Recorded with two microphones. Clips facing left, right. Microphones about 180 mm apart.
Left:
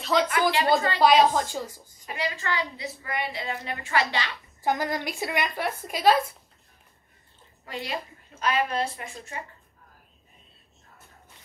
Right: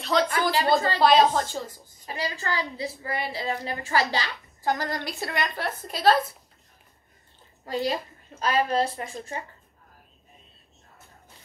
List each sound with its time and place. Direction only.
0.0 s a woman's voice: 5° left (ahead or behind)
0.3 s a woman's voice: 35° right (ahead or behind)
0.9 s a woman's voice: 10° left (ahead or behind)
2.0 s a woman's voice: 35° right (ahead or behind)
4.6 s a woman's voice: 15° left (ahead or behind)
7.6 s a woman's voice: 35° right (ahead or behind)